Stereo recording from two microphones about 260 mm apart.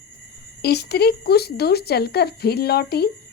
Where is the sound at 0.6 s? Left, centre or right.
Left.